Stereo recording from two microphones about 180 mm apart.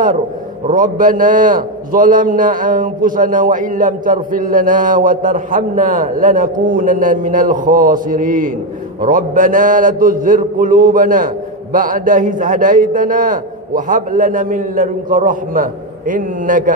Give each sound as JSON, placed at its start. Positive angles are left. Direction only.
{"t": 0.7, "sound": "a man's voice", "side_deg": -50}